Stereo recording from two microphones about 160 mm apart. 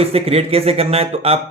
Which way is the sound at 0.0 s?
40° right (ahead or behind).